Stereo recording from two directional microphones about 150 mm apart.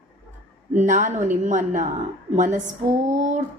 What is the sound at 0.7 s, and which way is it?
A woman's voice, 55° right (ahead or behind).